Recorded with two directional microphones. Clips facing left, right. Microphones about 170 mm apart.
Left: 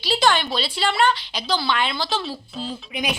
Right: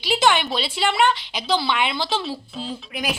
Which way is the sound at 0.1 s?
20° right (ahead or behind).